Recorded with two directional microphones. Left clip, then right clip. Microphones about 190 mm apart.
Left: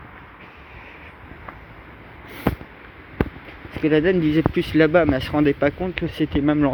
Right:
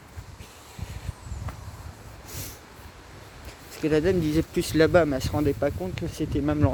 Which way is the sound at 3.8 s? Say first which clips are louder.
Left 5 dB; 15° right (ahead or behind).